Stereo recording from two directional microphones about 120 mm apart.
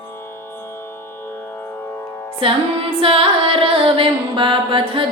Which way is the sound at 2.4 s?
50° right (ahead or behind).